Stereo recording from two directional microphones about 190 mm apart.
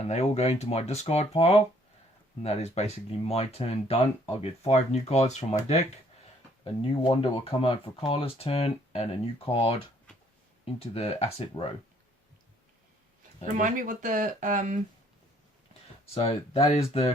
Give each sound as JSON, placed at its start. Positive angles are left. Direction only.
{"t": 0.0, "sound": "speech", "side_deg": 35}
{"t": 7.0, "sound": "speech", "side_deg": 30}
{"t": 13.6, "sound": "speech", "side_deg": -45}
{"t": 16.1, "sound": "speech", "side_deg": 30}